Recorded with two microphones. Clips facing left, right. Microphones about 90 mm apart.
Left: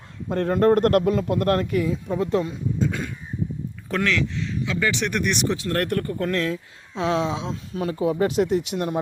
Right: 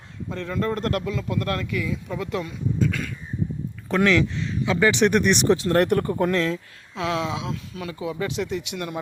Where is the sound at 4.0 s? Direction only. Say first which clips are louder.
Right 4 dB; 15° right (ahead or behind).